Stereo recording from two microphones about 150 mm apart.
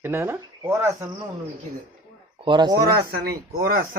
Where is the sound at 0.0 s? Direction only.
15° right (ahead or behind).